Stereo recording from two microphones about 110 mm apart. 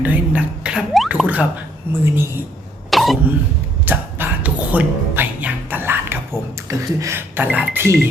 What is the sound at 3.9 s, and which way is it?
Music, 15° right (ahead or behind).